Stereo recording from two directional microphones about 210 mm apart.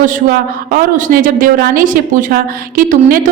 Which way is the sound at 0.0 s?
40° right (ahead or behind).